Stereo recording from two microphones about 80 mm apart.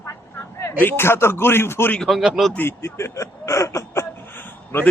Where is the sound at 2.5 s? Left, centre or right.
Left.